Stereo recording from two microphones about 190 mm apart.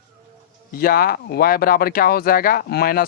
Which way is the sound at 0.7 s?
50° left (ahead or behind).